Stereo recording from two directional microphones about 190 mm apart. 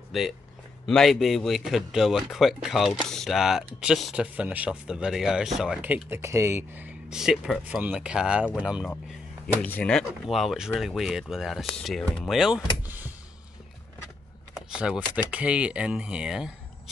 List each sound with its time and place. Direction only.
0.1 s speech: centre (ahead or behind)
9.6 s speech: 10° left (ahead or behind); by 13.1 s 10° right (ahead or behind)
14.7 s speech: 5° right (ahead or behind)